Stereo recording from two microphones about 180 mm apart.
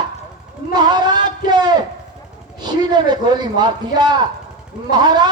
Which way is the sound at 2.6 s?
25° right (ahead or behind).